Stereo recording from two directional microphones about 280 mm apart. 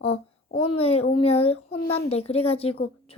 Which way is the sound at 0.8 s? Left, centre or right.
Left.